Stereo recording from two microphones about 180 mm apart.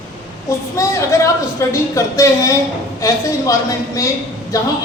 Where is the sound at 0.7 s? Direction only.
15° left (ahead or behind).